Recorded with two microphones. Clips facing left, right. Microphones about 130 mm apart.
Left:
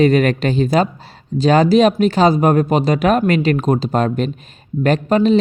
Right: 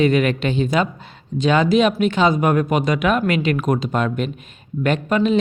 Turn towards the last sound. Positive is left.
turn(degrees=35)  # may be behind; listen again after turning